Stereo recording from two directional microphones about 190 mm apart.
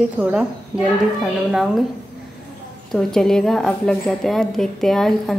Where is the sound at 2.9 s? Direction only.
Centre (ahead or behind).